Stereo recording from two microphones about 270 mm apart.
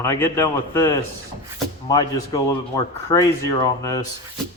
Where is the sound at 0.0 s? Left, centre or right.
Centre.